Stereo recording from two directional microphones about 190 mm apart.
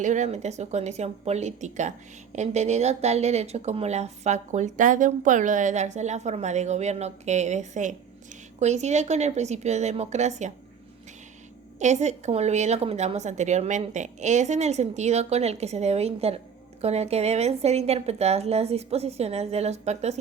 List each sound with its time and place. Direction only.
0.0 s speech: 40° right (ahead or behind)
11.8 s speech: 40° right (ahead or behind)